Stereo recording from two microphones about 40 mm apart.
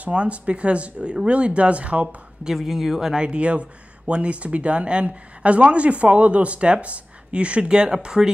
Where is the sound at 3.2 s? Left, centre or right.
Right.